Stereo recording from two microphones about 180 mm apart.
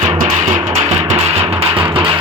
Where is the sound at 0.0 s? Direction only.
45° right (ahead or behind).